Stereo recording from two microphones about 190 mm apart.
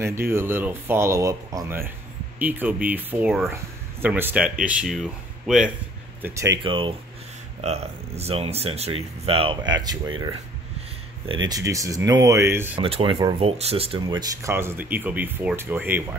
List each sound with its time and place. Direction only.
0.0 s speech: 15° right (ahead or behind)
6.2 s speech: 15° right (ahead or behind)
6.6 s speech: 25° right (ahead or behind)
11.4 s speech: 20° right (ahead or behind)
12.7 s speech: 30° right (ahead or behind)
14.4 s speech: 10° right (ahead or behind)